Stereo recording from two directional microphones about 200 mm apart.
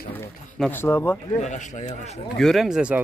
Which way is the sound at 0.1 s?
10° left (ahead or behind).